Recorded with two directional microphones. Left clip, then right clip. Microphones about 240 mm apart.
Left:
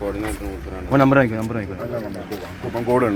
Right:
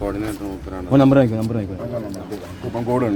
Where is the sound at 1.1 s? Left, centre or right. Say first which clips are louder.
Right 1 dB; right.